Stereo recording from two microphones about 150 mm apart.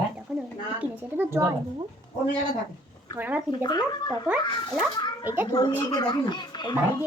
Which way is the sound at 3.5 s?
25° left (ahead or behind).